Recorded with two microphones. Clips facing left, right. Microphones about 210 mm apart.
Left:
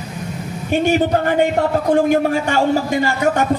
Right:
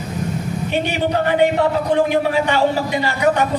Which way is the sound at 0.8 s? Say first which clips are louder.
Left 6 dB; 45° left (ahead or behind).